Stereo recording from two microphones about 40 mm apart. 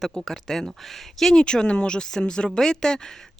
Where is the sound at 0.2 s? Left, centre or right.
Centre.